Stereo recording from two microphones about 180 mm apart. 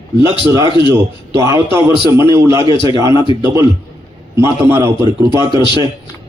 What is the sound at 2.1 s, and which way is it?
Speech, 15° right (ahead or behind).